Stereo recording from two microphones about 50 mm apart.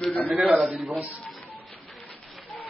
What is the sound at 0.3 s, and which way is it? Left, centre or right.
Speech, centre.